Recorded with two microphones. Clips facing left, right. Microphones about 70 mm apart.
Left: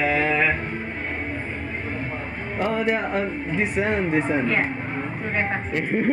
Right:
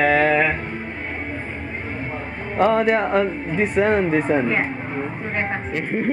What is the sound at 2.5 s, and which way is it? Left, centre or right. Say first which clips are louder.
Speech: right 6 dB; right.